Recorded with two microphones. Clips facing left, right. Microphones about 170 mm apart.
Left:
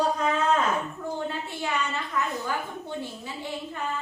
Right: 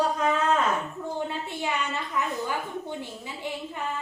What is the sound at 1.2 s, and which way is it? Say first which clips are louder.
Speech: right 2 dB; 15° right (ahead or behind).